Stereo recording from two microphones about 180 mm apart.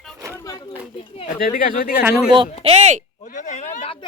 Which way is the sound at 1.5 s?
50° left (ahead or behind).